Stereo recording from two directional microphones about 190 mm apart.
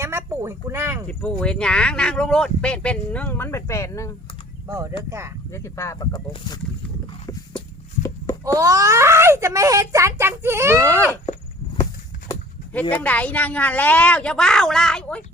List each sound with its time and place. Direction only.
0.0 s speech: 15° right (ahead or behind)
1.0 s speech: 5° left (ahead or behind)
4.7 s a child's voice: 15° right (ahead or behind)
5.5 s a woman's voice: 15° left (ahead or behind)
8.4 s a child's voice: 15° right (ahead or behind)
12.9 s a woman's voice: 10° left (ahead or behind)